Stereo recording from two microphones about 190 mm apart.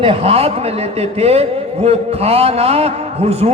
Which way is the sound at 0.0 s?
30° right (ahead or behind).